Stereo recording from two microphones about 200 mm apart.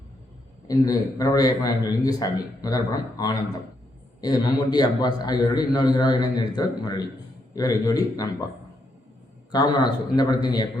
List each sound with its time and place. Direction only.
0.7 s a man's voice: 15° left (ahead or behind)
9.5 s a man's voice: 20° left (ahead or behind)